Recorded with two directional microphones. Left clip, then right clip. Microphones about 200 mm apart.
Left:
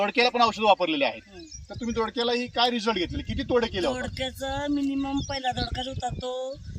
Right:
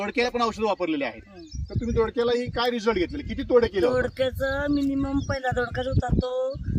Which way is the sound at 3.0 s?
25° left (ahead or behind).